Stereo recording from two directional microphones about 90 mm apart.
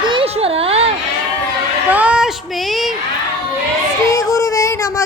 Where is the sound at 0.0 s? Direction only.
70° right (ahead or behind).